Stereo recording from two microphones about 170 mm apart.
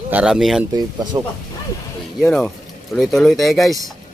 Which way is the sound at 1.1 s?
20° right (ahead or behind).